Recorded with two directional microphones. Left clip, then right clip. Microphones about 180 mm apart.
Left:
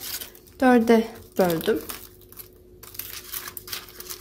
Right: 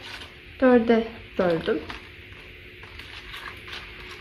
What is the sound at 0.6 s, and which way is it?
Speech, 60° left (ahead or behind).